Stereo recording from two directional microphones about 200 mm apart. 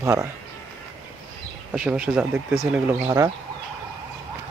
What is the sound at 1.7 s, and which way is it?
Speech, 5° right (ahead or behind).